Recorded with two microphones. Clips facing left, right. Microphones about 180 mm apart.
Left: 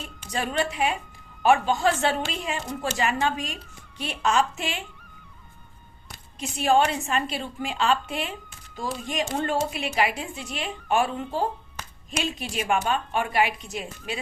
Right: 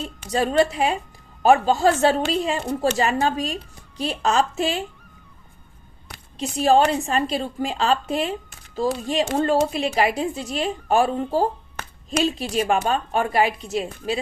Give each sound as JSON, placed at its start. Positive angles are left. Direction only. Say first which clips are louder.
{"t": 0.3, "sound": "a woman's voice", "louder": "right 8 dB", "side_deg": -35}
{"t": 6.4, "sound": "a woman's voice", "louder": "right 4 dB", "side_deg": -35}